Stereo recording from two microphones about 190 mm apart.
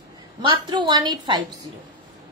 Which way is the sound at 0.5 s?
25° right (ahead or behind).